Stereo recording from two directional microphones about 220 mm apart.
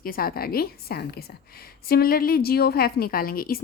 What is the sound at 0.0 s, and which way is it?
A woman's voice, 40° left (ahead or behind).